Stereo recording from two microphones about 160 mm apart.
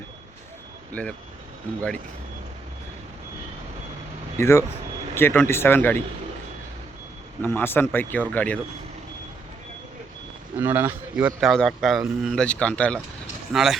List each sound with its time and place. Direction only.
1.0 s speech: 5° left (ahead or behind)
4.4 s speech: 15° left (ahead or behind)
7.4 s speech: 15° left (ahead or behind)
10.6 s speech: 15° right (ahead or behind); by 13.0 s 5° left (ahead or behind)
13.5 s speech: 5° right (ahead or behind)